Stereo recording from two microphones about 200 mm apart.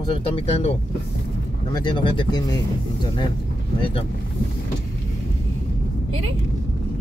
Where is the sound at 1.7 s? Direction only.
20° left (ahead or behind).